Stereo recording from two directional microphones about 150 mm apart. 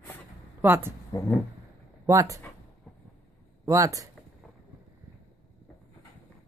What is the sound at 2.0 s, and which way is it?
Speech, 20° right (ahead or behind).